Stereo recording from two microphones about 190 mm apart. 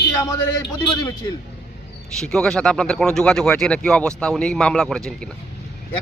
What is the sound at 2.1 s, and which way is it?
Speech, 5° left (ahead or behind).